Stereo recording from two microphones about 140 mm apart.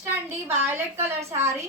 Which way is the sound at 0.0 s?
15° right (ahead or behind).